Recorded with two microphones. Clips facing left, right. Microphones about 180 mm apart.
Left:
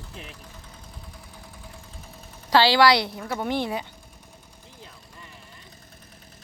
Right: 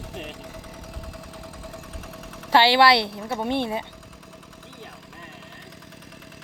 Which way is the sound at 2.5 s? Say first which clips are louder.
Right 1 dB; 25° right (ahead or behind).